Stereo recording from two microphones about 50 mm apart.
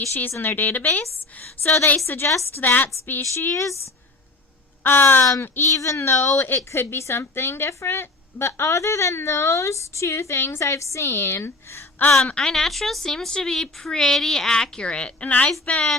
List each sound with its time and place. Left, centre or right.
0.1 s a woman's voice: left
1.6 s a woman's voice: left
3.5 s speech: left
4.8 s speech: left
5.6 s a woman's voice: left
7.7 s a woman's voice: left
10.6 s a woman's voice: left
12.1 s a woman's voice: centre; by 15.8 s left